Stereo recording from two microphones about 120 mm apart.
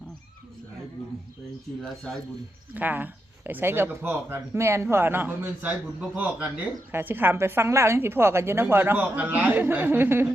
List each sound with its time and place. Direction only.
2.7 s a woman's voice: 15° right (ahead or behind)